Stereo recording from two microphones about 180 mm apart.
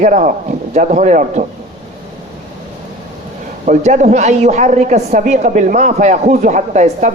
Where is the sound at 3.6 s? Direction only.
40° right (ahead or behind).